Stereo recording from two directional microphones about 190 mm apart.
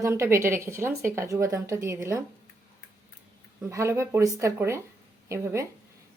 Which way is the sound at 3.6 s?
15° right (ahead or behind).